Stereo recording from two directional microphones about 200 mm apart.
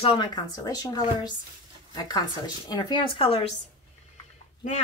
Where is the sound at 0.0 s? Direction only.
25° left (ahead or behind).